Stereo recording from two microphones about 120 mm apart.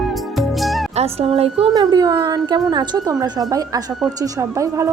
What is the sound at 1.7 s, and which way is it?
A woman's voice, 35° right (ahead or behind).